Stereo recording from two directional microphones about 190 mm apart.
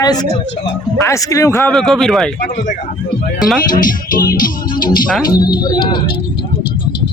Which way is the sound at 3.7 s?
45° left (ahead or behind).